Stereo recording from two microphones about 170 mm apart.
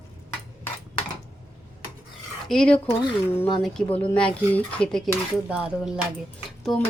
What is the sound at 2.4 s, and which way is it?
A woman's voice, 5° left (ahead or behind).